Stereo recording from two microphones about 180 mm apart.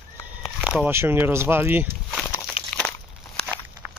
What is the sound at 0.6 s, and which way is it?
Speech, 5° right (ahead or behind).